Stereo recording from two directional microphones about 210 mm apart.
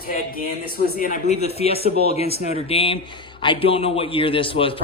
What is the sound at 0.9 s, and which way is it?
A man's voice, 40° left (ahead or behind).